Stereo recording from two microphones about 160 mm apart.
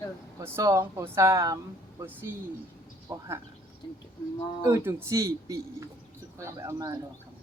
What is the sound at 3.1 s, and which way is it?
Speech, 15° right (ahead or behind).